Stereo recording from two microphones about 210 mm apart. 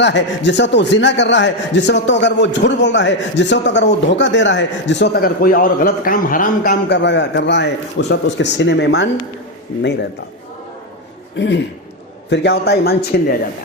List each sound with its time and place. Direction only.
0.0 s a man's voice: 55° left (ahead or behind)
11.3 s a man's voice: 55° left (ahead or behind)